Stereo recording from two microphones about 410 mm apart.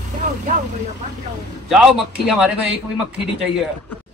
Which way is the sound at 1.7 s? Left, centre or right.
Centre.